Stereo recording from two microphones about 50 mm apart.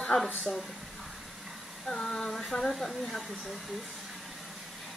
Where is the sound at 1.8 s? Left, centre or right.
Centre.